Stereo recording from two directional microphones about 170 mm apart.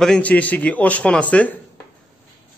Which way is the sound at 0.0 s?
5° left (ahead or behind).